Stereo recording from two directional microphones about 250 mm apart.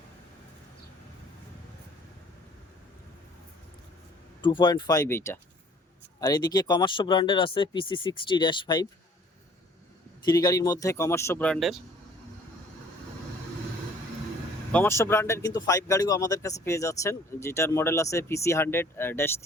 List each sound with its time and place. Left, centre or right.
4.4 s speech: centre
10.2 s speech: centre
14.7 s speech: centre